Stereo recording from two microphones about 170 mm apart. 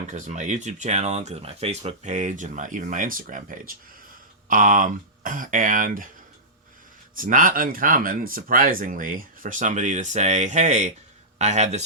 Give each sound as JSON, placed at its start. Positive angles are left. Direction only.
{"t": 0.1, "sound": "speech", "side_deg": -45}
{"t": 7.2, "sound": "speech", "side_deg": -55}